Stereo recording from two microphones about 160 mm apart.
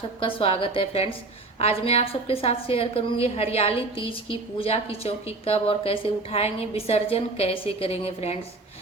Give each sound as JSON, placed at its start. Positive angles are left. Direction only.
{"t": 0.2, "sound": "a woman's voice", "side_deg": 35}